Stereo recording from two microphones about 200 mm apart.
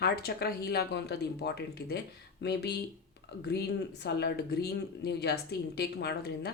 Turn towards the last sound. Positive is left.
turn(degrees=55)  # may be behind; listen again after turning